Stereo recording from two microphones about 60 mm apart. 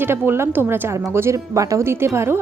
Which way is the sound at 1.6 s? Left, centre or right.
Right.